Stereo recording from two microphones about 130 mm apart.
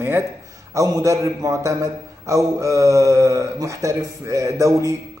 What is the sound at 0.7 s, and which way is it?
A man's voice, 25° right (ahead or behind).